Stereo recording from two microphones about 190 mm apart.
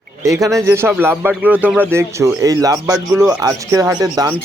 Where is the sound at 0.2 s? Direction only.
15° right (ahead or behind).